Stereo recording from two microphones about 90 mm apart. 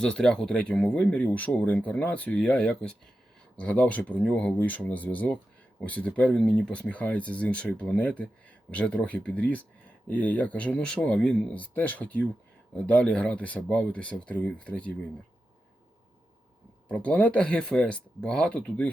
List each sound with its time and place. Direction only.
0.0 s speech: 10° left (ahead or behind)
16.9 s speech: 15° left (ahead or behind)